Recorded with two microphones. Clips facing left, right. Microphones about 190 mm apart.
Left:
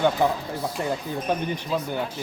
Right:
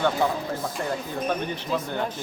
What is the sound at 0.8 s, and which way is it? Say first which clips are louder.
Speech: left 1 dB; 15° left (ahead or behind).